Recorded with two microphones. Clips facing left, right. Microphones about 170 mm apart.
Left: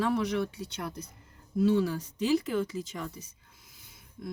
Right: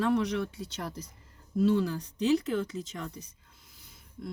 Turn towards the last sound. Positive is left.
turn(degrees=5)  # may be behind; listen again after turning